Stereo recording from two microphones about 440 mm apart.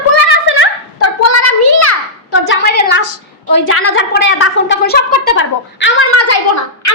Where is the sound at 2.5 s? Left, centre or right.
Left.